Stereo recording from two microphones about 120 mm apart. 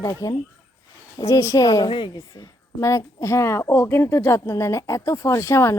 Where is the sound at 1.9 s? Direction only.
40° left (ahead or behind).